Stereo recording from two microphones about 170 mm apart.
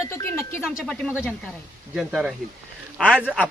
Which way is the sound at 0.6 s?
Centre (ahead or behind).